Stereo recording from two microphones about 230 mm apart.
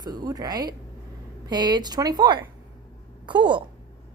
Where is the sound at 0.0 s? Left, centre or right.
Centre.